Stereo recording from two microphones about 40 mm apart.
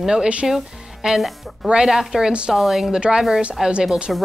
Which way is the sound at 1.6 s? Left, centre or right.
Right.